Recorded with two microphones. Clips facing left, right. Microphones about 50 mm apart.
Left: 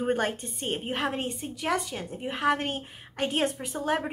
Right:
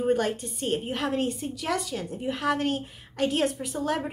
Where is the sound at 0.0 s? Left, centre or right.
Left.